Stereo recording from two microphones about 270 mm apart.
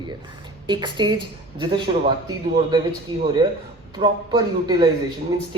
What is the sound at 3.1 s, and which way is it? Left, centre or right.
Speech, centre.